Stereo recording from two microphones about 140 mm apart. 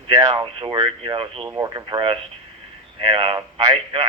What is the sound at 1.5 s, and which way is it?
Speech, 25° right (ahead or behind).